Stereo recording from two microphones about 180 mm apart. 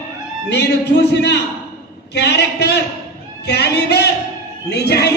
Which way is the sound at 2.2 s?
65° left (ahead or behind).